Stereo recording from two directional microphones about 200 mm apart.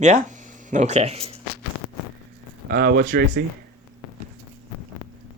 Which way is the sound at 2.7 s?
50° right (ahead or behind).